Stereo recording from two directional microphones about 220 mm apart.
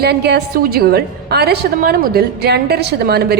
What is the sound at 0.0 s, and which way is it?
A woman's voice, 50° right (ahead or behind).